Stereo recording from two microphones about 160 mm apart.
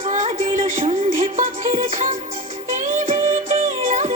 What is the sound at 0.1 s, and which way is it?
Music, 45° right (ahead or behind).